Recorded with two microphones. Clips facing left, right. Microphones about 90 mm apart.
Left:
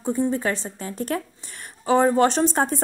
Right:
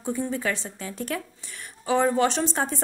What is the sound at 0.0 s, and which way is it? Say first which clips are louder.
A woman's voice: left 5 dB; 30° left (ahead or behind).